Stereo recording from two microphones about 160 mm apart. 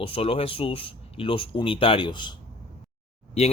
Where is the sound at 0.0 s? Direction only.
35° left (ahead or behind).